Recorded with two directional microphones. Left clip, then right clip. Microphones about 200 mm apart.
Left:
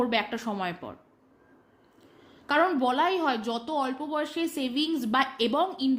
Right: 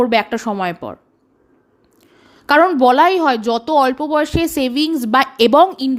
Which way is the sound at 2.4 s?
45° right (ahead or behind).